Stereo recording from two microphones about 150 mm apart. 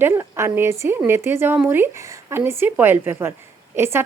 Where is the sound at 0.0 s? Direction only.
15° right (ahead or behind).